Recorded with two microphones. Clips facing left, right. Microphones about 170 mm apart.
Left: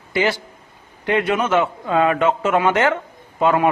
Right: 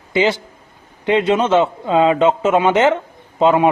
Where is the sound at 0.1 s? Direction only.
20° right (ahead or behind).